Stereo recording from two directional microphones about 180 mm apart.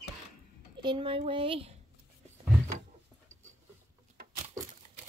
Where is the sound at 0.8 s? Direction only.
30° right (ahead or behind).